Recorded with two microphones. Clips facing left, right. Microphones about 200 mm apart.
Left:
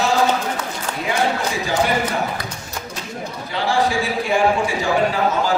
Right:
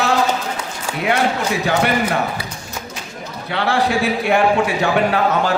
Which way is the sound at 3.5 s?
65° right (ahead or behind).